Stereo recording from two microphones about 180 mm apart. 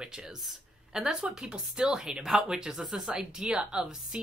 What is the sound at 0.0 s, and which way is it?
Speech, 5° right (ahead or behind).